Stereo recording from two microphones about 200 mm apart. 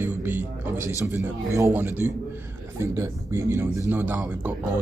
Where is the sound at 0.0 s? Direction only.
10° right (ahead or behind).